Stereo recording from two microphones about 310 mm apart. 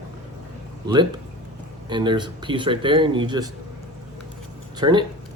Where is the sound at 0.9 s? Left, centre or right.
Centre.